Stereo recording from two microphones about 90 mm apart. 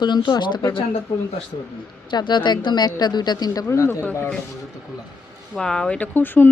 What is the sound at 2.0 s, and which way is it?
A woman's voice, 55° left (ahead or behind).